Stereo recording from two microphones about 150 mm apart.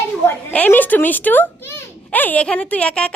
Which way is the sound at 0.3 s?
10° left (ahead or behind).